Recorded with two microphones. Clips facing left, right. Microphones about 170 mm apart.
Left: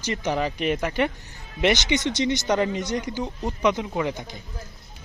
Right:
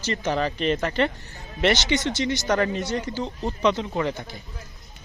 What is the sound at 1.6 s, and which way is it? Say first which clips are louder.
Speech: even; 15° left (ahead or behind).